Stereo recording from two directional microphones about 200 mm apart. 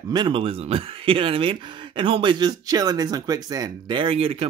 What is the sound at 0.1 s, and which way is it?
Speech, 25° right (ahead or behind).